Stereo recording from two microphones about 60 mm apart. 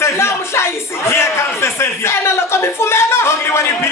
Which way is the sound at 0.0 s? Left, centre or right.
Left.